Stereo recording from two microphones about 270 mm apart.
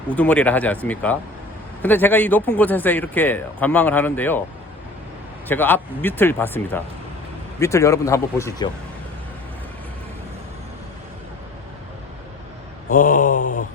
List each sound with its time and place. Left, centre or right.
0.1 s a man's voice: centre
5.5 s a man's voice: centre
12.9 s mantra: left